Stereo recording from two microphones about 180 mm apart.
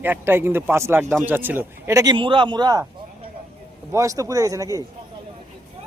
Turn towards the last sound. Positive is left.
turn(degrees=-20)  # may be behind; listen again after turning